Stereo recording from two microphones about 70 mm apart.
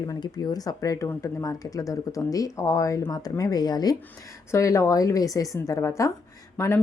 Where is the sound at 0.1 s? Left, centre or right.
Left.